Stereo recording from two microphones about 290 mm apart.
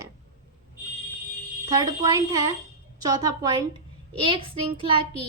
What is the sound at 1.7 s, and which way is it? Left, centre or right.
A woman's voice, centre.